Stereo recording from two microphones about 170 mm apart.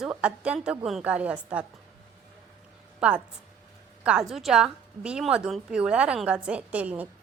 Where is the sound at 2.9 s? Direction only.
5° right (ahead or behind).